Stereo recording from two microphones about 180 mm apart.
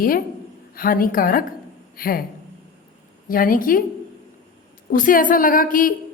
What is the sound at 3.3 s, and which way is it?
Speech, 50° left (ahead or behind).